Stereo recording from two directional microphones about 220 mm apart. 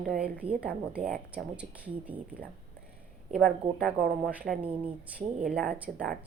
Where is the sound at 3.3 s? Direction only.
Centre (ahead or behind).